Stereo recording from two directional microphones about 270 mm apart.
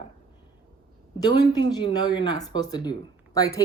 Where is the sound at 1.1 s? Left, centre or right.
Centre.